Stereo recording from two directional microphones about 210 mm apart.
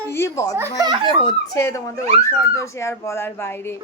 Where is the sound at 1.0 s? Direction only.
20° left (ahead or behind).